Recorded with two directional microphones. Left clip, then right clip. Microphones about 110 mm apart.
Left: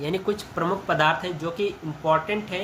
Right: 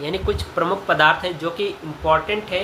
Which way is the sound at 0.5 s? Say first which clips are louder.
Right 6 dB; 20° left (ahead or behind).